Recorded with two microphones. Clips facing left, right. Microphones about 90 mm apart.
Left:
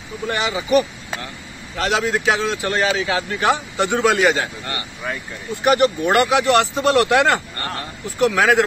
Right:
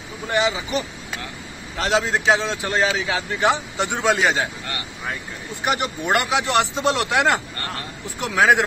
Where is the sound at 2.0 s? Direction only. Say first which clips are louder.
Right 1 dB; 20° right (ahead or behind).